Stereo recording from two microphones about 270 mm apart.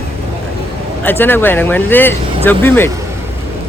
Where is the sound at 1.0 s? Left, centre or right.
Centre.